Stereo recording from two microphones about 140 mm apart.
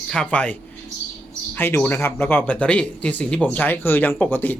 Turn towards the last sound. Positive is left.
turn(degrees=15)  # may be behind; listen again after turning